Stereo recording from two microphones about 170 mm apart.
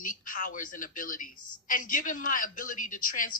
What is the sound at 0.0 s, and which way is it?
A woman's voice, 50° left (ahead or behind).